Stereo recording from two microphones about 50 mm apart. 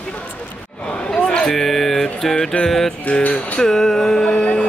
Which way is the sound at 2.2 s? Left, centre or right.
Centre.